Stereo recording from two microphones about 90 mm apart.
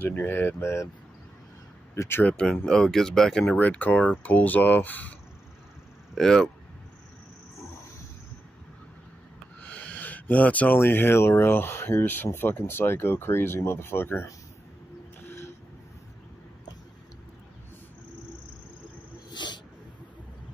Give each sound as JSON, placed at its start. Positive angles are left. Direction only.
{"t": 0.0, "sound": "speech", "side_deg": 25}
{"t": 2.0, "sound": "speech", "side_deg": 25}
{"t": 2.5, "sound": "speech", "side_deg": 5}
{"t": 3.5, "sound": "speech", "side_deg": 20}
{"t": 6.1, "sound": "speech", "side_deg": 5}
{"t": 9.6, "sound": "speech", "side_deg": 15}
{"t": 15.2, "sound": "music", "side_deg": 30}
{"t": 19.3, "sound": "a sound", "side_deg": 55}